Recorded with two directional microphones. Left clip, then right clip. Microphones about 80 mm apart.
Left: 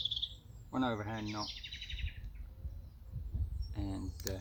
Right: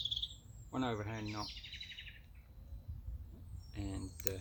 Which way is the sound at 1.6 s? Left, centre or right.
Centre.